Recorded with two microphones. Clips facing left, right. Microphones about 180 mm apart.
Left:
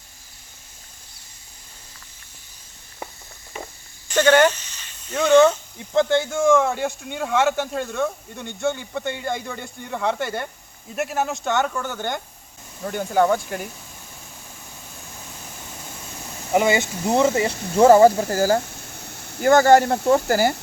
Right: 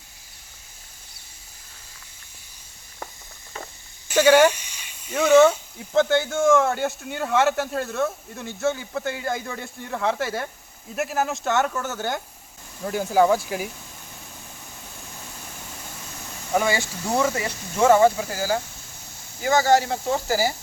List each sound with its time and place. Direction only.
4.1 s speech: 10° right (ahead or behind)
16.5 s speech: 20° left (ahead or behind); by 18.6 s 45° left (ahead or behind)
18.9 s speech: 65° left (ahead or behind)